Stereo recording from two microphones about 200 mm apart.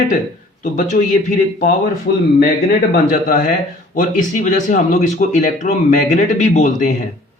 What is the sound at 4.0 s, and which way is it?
Speech, 40° left (ahead or behind).